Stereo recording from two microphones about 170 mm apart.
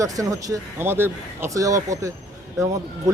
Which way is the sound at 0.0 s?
20° right (ahead or behind).